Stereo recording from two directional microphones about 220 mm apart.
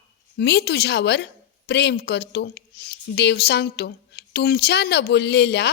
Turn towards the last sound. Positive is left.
turn(degrees=50)  # may be behind; listen again after turning